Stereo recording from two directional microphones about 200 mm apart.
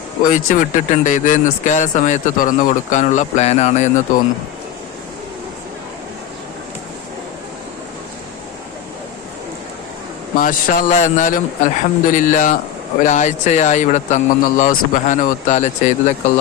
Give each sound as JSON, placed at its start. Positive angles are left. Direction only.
{"t": 0.3, "sound": "speech", "side_deg": 40}
{"t": 10.3, "sound": "speech", "side_deg": 40}